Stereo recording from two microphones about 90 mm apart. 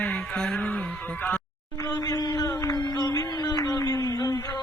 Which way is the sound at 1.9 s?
45° left (ahead or behind).